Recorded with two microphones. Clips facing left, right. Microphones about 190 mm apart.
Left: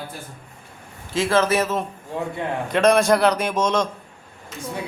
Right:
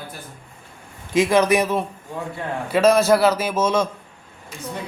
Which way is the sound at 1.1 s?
15° right (ahead or behind).